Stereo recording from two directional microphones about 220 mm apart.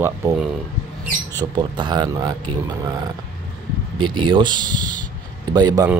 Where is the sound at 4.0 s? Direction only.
20° right (ahead or behind).